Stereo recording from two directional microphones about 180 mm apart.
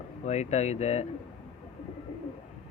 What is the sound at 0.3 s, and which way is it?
Speech, 40° left (ahead or behind).